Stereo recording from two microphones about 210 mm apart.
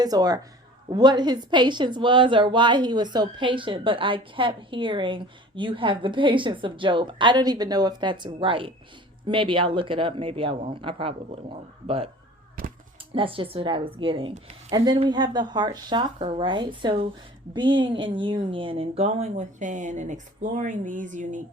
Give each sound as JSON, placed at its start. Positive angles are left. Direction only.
{"t": 0.0, "sound": "a woman's voice", "side_deg": -20}
{"t": 12.6, "sound": "a sound", "side_deg": -40}
{"t": 13.1, "sound": "a woman's voice", "side_deg": -25}